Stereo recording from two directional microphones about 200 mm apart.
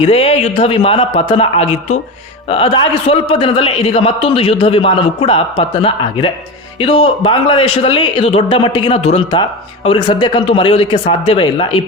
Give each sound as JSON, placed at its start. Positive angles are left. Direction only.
{"t": 0.0, "sound": "speech", "side_deg": 30}